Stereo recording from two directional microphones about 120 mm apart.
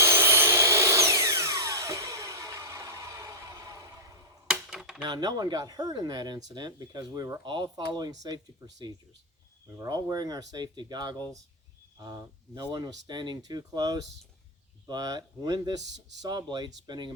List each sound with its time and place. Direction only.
0.0 s vacuum cleaner: 20° right (ahead or behind)
4.4 s a sound: 5° right (ahead or behind)
5.0 s speech: 35° right (ahead or behind)